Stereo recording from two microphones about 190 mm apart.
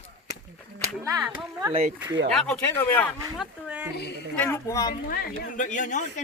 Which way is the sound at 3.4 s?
5° right (ahead or behind).